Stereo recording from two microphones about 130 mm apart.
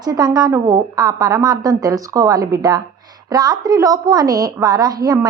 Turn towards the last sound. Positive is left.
turn(degrees=-30)  # may be behind; listen again after turning